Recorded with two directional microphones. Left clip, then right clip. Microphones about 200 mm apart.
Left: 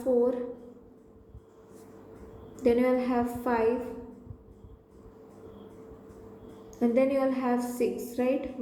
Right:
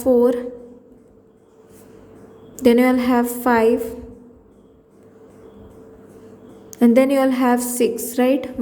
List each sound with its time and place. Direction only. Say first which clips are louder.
0.0 s a woman's voice: right 10 dB; 55° right (ahead or behind)
2.6 s a woman's voice: right 9 dB; 55° right (ahead or behind)
6.7 s a woman's voice: right 10 dB; 55° right (ahead or behind)